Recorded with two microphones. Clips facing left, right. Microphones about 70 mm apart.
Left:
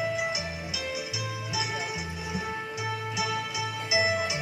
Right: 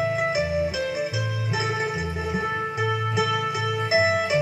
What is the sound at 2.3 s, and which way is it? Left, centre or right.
Music, right.